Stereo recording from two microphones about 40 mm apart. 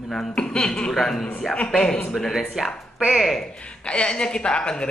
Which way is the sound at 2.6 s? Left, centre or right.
Centre.